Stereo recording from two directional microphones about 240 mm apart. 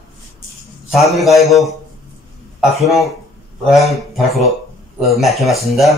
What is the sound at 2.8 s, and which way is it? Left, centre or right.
Speech, centre.